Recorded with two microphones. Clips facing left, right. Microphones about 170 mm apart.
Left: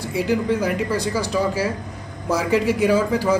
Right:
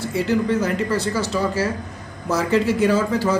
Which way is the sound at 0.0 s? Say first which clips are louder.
Right 1 dB; 10° left (ahead or behind).